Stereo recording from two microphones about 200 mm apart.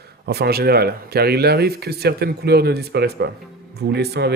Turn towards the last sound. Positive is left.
turn(degrees=-55)  # may be behind; listen again after turning